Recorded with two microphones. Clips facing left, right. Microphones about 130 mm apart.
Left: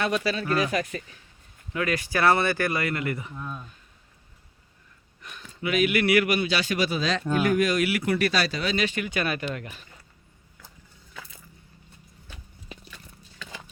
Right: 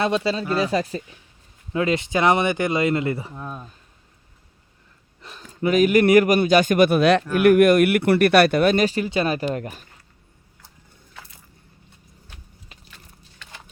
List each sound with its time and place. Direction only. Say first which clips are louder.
0.0 s speech: right 4 dB; 25° right (ahead or behind)
5.2 s speech: right 8 dB; 35° right (ahead or behind)